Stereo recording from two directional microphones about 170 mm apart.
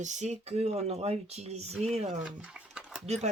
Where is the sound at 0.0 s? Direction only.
45° right (ahead or behind).